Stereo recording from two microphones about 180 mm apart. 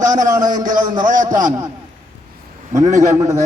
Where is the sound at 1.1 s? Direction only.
45° right (ahead or behind).